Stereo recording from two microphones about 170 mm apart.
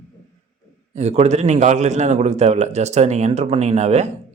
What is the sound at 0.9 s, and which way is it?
Speech, 40° right (ahead or behind).